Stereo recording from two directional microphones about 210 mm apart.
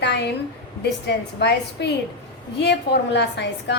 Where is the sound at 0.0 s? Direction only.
55° left (ahead or behind).